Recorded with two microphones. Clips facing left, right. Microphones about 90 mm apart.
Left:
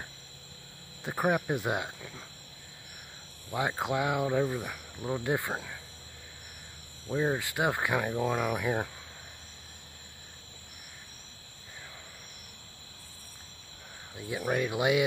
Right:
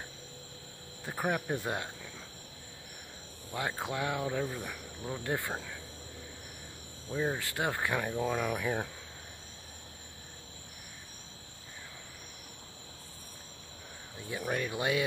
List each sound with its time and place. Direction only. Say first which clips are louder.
1.0 s cricket: left 4 dB; 15° left (ahead or behind)
2.0 s cricket: left 2 dB; centre (ahead or behind)
3.5 s cricket: left 5 dB; 20° left (ahead or behind)
7.1 s cricket: left 4 dB; 20° left (ahead or behind)
14.1 s speech: left 4 dB; 15° left (ahead or behind)